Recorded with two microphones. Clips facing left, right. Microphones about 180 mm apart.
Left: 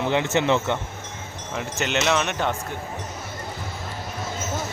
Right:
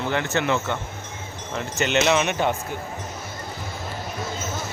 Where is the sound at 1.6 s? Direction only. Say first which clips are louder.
Right 3 dB; centre (ahead or behind).